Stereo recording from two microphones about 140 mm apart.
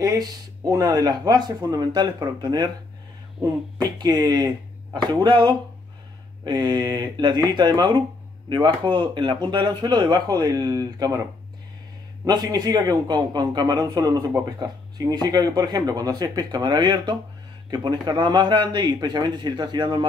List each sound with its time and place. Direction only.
0.0 s speech: 25° right (ahead or behind)
3.7 s speech: 30° right (ahead or behind)
12.3 s speech: 30° right (ahead or behind)